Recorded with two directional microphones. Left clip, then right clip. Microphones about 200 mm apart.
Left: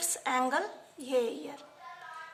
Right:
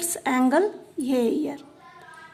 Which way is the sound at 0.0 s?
35° right (ahead or behind).